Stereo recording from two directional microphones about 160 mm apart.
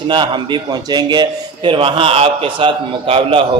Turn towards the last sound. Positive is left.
turn(degrees=-35)  # may be behind; listen again after turning